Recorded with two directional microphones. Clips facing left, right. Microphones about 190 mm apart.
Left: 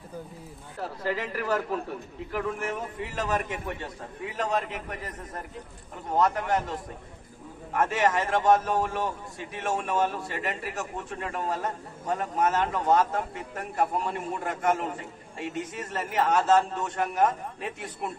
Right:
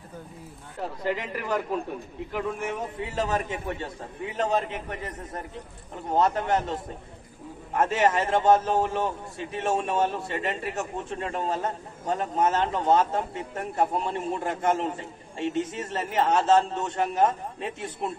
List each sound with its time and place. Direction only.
0.7 s speech: 15° right (ahead or behind)
3.0 s a man's voice: 25° right (ahead or behind)
6.1 s a man's voice: 25° right (ahead or behind)